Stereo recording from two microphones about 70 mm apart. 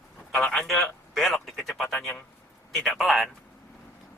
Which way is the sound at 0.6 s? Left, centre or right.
Centre.